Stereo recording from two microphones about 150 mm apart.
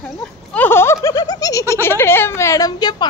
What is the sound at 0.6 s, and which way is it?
Speech, 15° left (ahead or behind).